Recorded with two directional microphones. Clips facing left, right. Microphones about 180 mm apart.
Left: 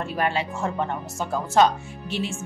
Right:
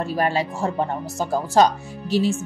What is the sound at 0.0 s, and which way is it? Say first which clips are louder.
Speech: right 3 dB; 40° right (ahead or behind).